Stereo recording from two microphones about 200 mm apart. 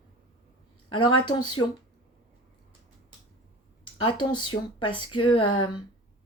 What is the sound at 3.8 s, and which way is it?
A woman's voice, 25° left (ahead or behind).